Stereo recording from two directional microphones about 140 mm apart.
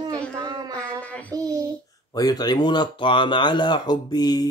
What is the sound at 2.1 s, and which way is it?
Speech, 30° left (ahead or behind).